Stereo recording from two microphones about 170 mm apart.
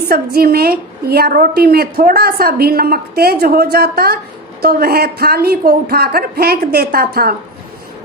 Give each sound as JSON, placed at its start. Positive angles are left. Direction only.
{"t": 0.1, "sound": "a woman's voice", "side_deg": -65}